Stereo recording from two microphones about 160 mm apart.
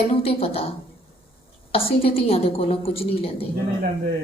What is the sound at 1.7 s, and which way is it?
A woman's voice, 40° left (ahead or behind).